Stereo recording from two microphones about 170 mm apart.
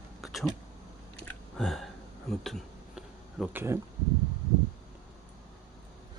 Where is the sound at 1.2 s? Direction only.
Centre (ahead or behind).